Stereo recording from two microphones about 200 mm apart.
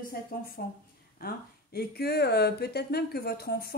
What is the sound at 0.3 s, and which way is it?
A woman's voice, 45° left (ahead or behind).